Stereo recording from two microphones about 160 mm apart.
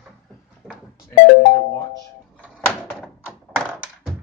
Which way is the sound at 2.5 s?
10° left (ahead or behind).